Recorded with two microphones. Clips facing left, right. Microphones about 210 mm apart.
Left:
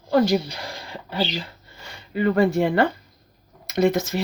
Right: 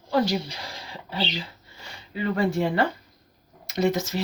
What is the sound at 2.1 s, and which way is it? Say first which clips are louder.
Speech: left 6 dB; 50° left (ahead or behind).